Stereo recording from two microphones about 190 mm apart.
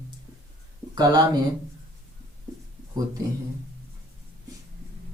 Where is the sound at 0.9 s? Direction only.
20° right (ahead or behind).